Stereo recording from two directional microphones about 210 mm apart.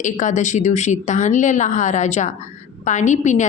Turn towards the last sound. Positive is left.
turn(degrees=35)  # may be behind; listen again after turning